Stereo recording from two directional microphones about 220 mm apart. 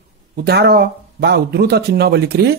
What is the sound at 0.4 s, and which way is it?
Speech, 45° right (ahead or behind).